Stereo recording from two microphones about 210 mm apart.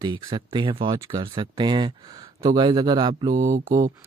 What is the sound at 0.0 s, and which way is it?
Speech, 20° right (ahead or behind).